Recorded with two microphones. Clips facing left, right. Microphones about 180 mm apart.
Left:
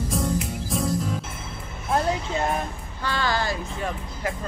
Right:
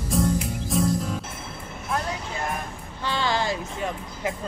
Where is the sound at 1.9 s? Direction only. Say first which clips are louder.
Left 5 dB; 30° left (ahead or behind).